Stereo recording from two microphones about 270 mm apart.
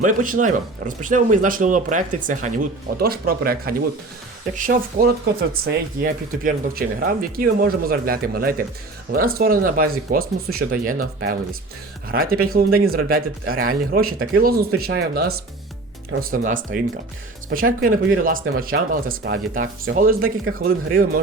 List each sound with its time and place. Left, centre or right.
0.0 s speech: right